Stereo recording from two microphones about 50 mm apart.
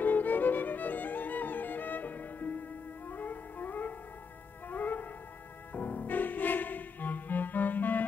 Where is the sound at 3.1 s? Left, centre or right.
Left.